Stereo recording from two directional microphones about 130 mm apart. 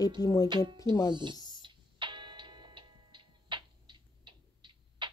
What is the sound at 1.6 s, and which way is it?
Tick-tock, 40° right (ahead or behind).